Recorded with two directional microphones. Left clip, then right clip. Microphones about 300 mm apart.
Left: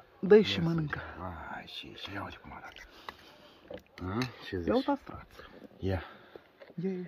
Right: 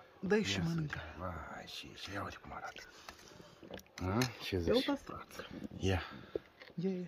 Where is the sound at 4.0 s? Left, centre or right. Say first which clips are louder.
Even; right.